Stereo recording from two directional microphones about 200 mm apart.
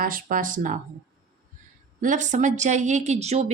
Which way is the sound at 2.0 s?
40° right (ahead or behind).